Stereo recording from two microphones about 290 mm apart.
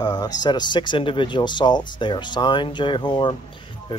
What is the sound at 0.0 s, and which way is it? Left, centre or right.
Speech, centre.